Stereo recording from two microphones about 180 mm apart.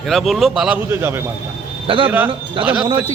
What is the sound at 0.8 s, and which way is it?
A man's voice, 15° right (ahead or behind).